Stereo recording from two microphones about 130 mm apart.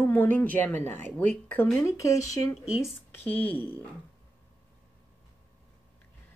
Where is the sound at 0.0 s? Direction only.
15° left (ahead or behind).